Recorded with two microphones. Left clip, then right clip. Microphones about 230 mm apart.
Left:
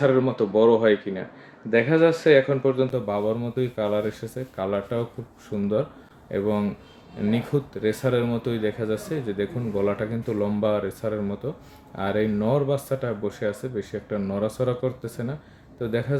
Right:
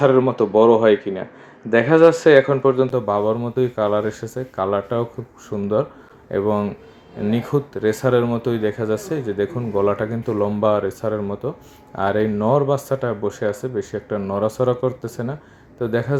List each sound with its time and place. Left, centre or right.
0.0 s speech: centre